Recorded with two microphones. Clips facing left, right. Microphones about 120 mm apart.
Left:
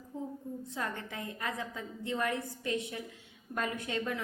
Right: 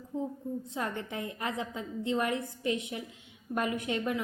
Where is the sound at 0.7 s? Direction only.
20° right (ahead or behind).